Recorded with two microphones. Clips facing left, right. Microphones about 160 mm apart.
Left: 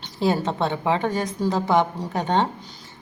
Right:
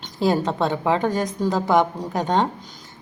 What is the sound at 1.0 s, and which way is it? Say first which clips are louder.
Speech: right 2 dB; 40° right (ahead or behind).